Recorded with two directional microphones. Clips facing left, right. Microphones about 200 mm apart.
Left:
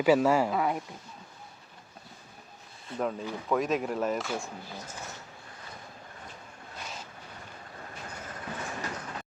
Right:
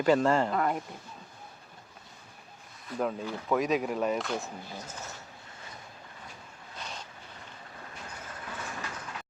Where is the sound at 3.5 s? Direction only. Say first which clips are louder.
Right 1 dB; centre (ahead or behind).